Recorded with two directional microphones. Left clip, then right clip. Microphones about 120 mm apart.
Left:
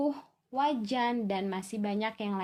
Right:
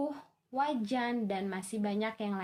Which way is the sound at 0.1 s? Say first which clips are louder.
Left 3 dB; 40° left (ahead or behind).